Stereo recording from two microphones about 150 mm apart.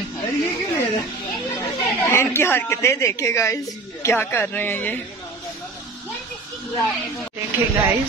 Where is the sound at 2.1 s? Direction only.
15° left (ahead or behind).